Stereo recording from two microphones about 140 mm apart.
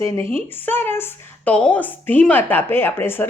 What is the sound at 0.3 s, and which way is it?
A woman's voice, 15° left (ahead or behind).